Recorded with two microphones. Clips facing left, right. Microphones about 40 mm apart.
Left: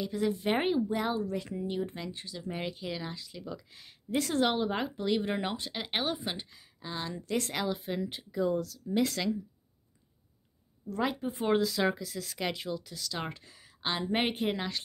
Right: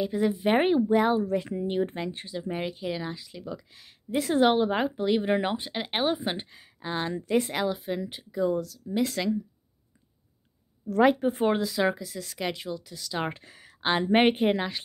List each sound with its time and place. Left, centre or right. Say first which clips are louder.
0.0 s speech: right 5 dB; centre
2.6 s speech: right 5 dB; centre
4.2 s speech: right 7 dB; centre
6.2 s speech: right 6 dB; right
7.2 s speech: right 6 dB; centre
7.6 s speech: right 4 dB; centre
11.0 s speech: right 11 dB; right
11.5 s speech: right 2 dB; centre
13.3 s speech: right 5 dB; right